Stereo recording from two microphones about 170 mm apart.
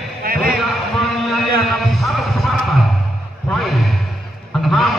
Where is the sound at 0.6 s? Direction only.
Centre (ahead or behind).